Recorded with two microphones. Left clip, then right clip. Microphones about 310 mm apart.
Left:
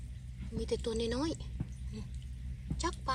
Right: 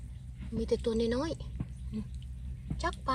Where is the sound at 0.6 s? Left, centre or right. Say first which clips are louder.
Right 5 dB; centre.